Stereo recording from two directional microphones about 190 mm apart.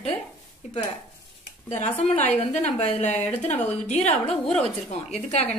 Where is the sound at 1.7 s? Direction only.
35° left (ahead or behind).